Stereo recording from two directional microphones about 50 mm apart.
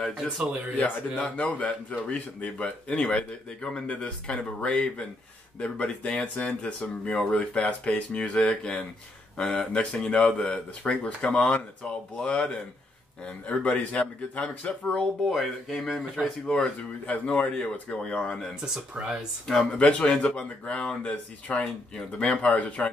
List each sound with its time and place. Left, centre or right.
0.7 s speech: left
15.2 s speech: centre
16.4 s speech: left
18.6 s speech: centre
19.4 s speech: centre